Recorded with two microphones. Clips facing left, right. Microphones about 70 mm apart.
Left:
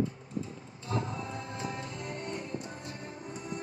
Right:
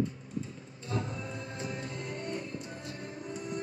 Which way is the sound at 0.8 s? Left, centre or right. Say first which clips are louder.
Left 2 dB; left.